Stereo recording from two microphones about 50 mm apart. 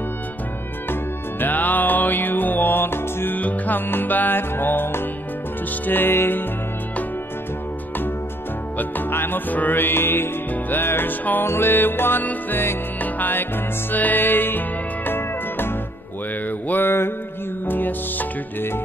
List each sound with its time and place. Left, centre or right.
1.4 s music: left
3.3 s music: left
8.7 s music: left
11.4 s music: left